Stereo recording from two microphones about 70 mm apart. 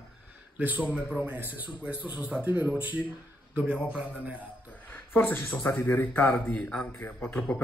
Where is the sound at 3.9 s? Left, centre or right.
Centre.